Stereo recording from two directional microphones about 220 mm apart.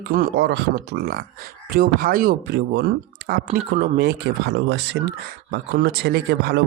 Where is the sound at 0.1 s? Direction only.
45° right (ahead or behind).